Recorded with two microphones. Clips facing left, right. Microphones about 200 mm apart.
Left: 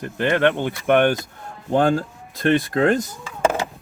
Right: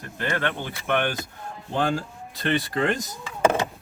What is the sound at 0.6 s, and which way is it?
Speech, 50° left (ahead or behind).